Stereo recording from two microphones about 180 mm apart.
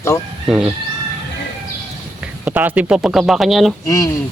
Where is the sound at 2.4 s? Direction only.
10° right (ahead or behind).